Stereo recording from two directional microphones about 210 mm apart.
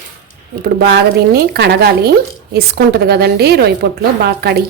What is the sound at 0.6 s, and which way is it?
Speech, 50° right (ahead or behind).